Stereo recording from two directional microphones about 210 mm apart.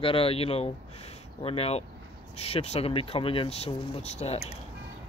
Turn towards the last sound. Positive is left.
turn(degrees=30)  # may be behind; listen again after turning